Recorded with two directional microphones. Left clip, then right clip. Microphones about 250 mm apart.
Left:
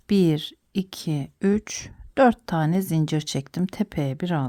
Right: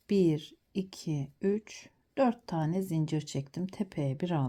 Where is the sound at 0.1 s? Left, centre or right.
Centre.